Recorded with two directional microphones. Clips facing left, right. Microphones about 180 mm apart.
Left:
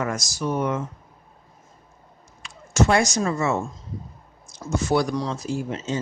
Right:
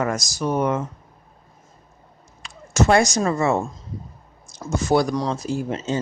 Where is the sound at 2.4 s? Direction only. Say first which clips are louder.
Right 1 dB; 35° right (ahead or behind).